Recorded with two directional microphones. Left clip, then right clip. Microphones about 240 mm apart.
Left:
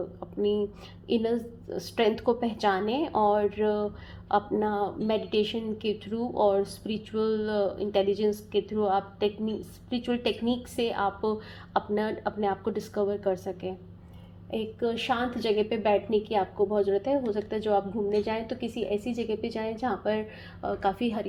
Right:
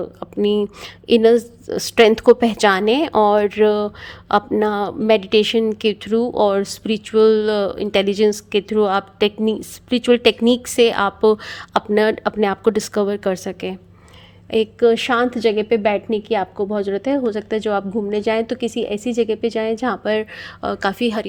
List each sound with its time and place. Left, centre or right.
0.2 s a woman's voice: right